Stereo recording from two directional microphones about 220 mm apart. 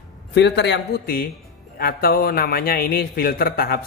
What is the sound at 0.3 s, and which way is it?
Speech, 50° left (ahead or behind).